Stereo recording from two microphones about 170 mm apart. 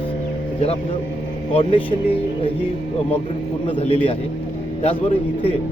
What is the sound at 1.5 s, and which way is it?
Speech, 30° left (ahead or behind).